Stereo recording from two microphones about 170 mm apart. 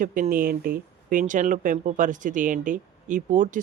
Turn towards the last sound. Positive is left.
turn(degrees=-50)  # may be behind; listen again after turning